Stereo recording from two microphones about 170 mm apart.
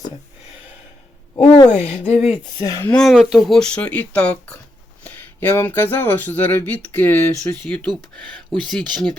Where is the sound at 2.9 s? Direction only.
Centre (ahead or behind).